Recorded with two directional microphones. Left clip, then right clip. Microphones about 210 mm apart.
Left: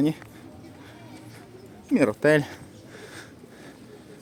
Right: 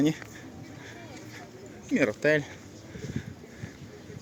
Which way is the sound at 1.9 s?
35° left (ahead or behind).